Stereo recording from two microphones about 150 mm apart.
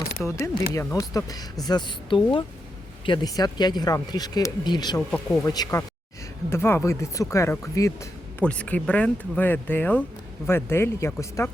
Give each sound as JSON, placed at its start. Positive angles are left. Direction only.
{"t": 0.2, "sound": "a woman's voice", "side_deg": 20}
{"t": 4.9, "sound": "speech", "side_deg": 5}
{"t": 5.4, "sound": "speech", "side_deg": 25}
{"t": 8.4, "sound": "speech", "side_deg": 10}